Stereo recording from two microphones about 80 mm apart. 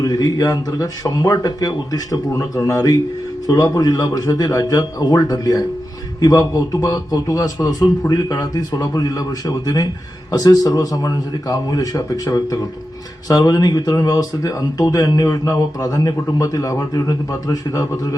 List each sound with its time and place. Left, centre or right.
0.0 s speech: left